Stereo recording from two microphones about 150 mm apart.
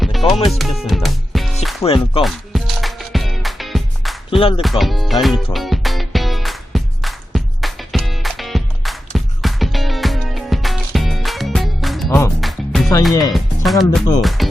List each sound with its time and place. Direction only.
0.2 s music: 35° left (ahead or behind)
0.6 s music: centre (ahead or behind)
1.8 s speech: 40° left (ahead or behind)
2.2 s music: centre (ahead or behind)
4.3 s speech: 35° left (ahead or behind)
4.6 s speech: centre (ahead or behind)
5.5 s music: centre (ahead or behind)
13.3 s speech: centre (ahead or behind)